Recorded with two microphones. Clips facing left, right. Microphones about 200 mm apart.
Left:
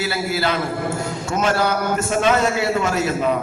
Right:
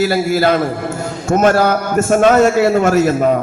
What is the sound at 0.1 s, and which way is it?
A man's voice, 45° right (ahead or behind).